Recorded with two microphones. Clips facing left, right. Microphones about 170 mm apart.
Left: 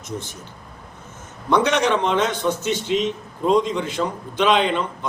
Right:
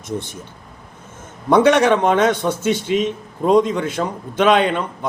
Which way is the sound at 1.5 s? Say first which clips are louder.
Right 6 dB; 50° right (ahead or behind).